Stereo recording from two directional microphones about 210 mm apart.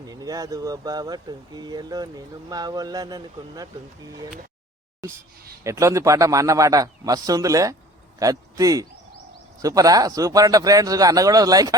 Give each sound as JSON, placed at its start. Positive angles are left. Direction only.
{"t": 0.0, "sound": "speech", "side_deg": -15}
{"t": 5.6, "sound": "speech", "side_deg": -15}